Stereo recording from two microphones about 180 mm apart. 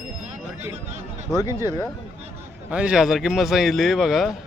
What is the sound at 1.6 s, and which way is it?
Speech, 20° left (ahead or behind).